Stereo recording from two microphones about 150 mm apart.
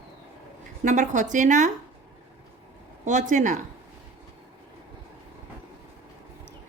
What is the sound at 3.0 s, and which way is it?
Speech, 55° right (ahead or behind).